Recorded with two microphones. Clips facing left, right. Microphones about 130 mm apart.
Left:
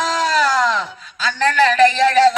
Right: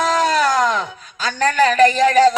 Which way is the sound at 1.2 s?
45° right (ahead or behind).